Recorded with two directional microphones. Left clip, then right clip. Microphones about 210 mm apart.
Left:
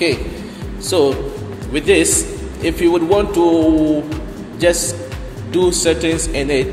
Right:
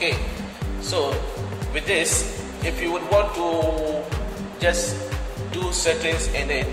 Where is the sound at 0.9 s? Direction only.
45° left (ahead or behind).